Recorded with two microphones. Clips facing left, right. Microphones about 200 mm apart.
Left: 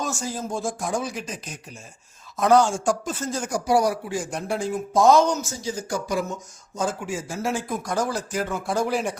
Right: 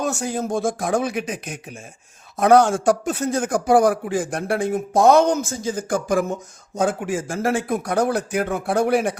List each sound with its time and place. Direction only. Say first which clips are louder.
0.0 s a man's voice: right 5 dB; 65° right (ahead or behind)